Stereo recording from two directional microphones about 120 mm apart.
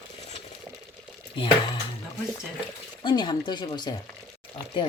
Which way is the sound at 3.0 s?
40° left (ahead or behind).